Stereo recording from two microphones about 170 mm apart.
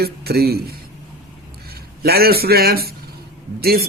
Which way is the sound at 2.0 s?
65° right (ahead or behind).